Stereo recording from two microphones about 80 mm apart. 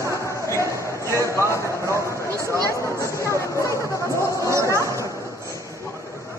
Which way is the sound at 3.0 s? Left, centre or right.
Left.